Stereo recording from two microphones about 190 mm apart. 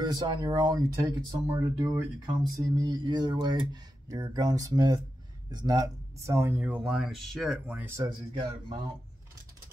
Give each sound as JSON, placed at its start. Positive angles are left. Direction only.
{"t": 0.0, "sound": "speech", "side_deg": -20}